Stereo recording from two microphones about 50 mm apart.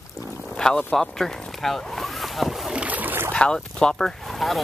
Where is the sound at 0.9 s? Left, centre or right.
Centre.